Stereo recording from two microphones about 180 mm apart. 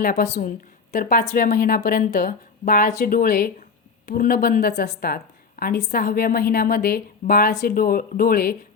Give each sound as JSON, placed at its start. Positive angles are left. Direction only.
{"t": 0.0, "sound": "a woman's voice", "side_deg": 55}